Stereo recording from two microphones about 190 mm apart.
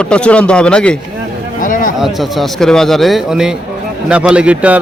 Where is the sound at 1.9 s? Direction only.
Centre (ahead or behind).